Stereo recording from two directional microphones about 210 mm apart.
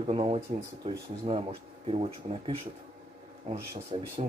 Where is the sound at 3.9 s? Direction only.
25° right (ahead or behind).